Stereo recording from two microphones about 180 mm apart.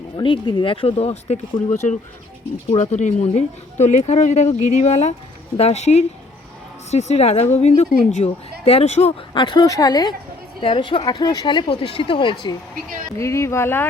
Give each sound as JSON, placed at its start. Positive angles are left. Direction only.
{"t": 0.2, "sound": "a woman's voice", "side_deg": 25}
{"t": 13.1, "sound": "speech", "side_deg": 15}